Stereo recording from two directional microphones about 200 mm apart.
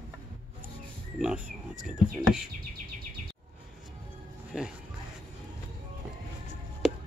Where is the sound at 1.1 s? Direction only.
5° right (ahead or behind).